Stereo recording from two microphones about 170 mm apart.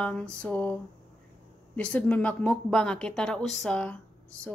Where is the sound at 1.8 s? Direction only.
10° left (ahead or behind).